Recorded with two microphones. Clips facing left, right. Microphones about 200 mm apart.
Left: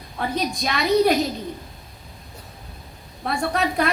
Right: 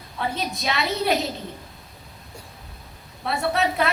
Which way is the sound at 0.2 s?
45° left (ahead or behind).